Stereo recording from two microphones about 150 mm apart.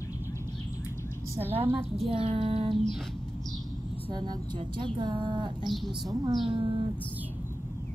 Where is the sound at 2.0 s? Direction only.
35° right (ahead or behind).